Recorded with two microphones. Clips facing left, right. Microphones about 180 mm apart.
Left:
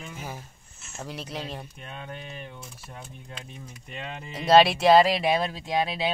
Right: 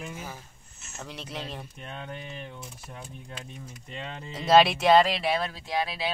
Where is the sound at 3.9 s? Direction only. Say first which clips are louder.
Left 1 dB; 5° left (ahead or behind).